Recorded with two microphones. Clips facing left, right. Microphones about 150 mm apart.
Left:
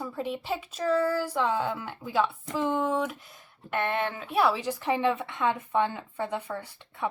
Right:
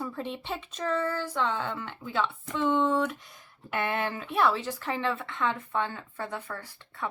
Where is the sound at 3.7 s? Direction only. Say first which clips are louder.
Left 1 dB; centre (ahead or behind).